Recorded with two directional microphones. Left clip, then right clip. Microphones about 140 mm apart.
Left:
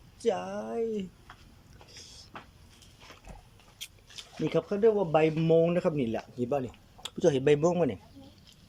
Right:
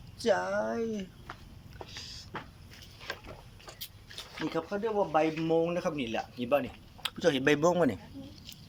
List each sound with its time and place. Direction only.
0.2 s speech: 20° left (ahead or behind)
4.4 s speech: 90° left; by 7.4 s 45° left (ahead or behind)
7.4 s speech: 25° left (ahead or behind)